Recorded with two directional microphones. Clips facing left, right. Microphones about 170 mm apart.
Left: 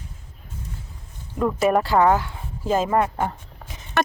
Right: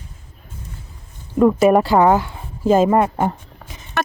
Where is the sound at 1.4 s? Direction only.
20° right (ahead or behind).